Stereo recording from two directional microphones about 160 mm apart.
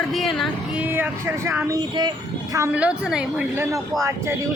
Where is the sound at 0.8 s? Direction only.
15° right (ahead or behind).